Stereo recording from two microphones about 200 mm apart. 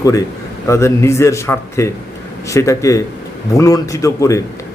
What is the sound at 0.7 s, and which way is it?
A man's voice, 15° left (ahead or behind).